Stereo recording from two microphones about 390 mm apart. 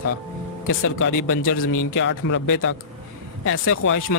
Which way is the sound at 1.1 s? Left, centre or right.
Left.